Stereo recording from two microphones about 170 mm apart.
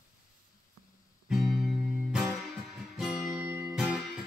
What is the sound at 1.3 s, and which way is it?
Music, centre (ahead or behind).